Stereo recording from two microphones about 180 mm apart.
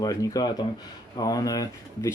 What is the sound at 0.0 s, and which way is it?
Speech, 20° left (ahead or behind).